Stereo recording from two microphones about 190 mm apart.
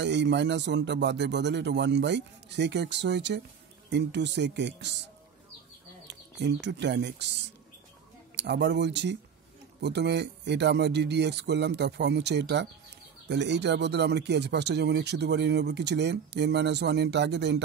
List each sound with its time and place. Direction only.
0.0 s speech: 65° right (ahead or behind)
6.0 s speech: 65° right (ahead or behind)
8.4 s speech: 65° right (ahead or behind)